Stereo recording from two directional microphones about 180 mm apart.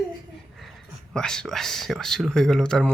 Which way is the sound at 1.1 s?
5° left (ahead or behind).